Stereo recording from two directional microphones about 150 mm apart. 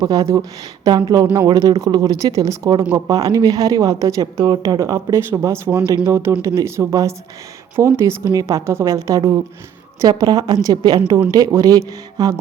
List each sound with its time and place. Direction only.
0.0 s a woman's voice: 25° right (ahead or behind)